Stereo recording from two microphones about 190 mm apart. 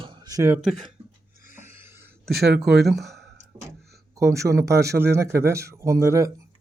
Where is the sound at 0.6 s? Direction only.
Centre (ahead or behind).